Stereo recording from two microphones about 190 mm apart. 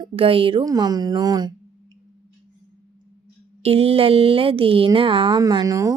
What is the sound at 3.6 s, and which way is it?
Speech, 30° right (ahead or behind).